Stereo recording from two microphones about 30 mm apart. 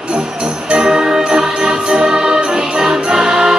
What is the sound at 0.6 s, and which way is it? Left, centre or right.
Jingle bell, right.